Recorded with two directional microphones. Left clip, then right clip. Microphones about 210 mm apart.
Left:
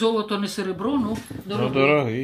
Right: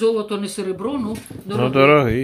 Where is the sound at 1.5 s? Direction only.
35° right (ahead or behind).